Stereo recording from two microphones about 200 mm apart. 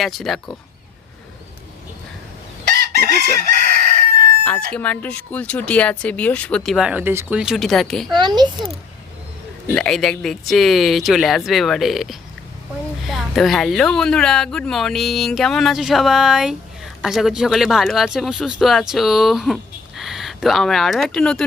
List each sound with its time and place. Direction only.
0.0 s speech: centre (ahead or behind)
3.6 s crowing: 45° right (ahead or behind)
4.4 s speech: 5° left (ahead or behind)
8.1 s a child's voice: 20° right (ahead or behind)
9.6 s speech: 5° left (ahead or behind)